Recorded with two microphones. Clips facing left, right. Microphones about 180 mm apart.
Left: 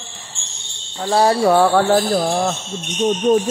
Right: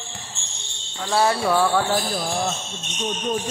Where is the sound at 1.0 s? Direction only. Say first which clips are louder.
Left 6 dB; 35° left (ahead or behind); by 2.4 s 60° left (ahead or behind).